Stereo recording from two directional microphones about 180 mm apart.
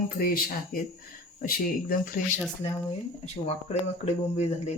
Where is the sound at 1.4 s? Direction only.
55° left (ahead or behind).